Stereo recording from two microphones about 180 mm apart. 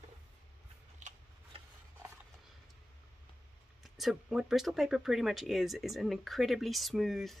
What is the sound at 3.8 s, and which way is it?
Speech, centre (ahead or behind).